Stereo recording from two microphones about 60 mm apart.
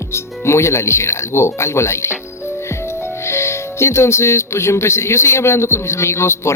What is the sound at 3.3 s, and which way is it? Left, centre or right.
Speech, left.